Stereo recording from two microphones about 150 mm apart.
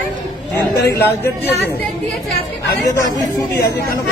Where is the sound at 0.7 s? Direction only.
15° left (ahead or behind).